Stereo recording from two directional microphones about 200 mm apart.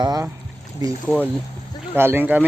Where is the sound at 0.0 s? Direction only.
20° right (ahead or behind).